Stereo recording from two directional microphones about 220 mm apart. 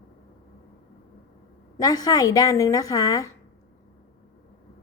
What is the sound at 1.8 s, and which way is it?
A woman's voice, 15° left (ahead or behind).